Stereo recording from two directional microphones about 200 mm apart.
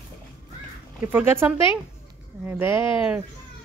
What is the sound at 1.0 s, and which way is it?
Speech, 10° right (ahead or behind).